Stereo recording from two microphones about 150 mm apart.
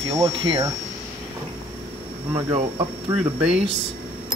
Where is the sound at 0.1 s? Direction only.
25° right (ahead or behind).